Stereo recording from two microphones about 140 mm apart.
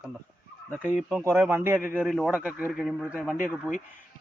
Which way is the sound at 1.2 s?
20° right (ahead or behind).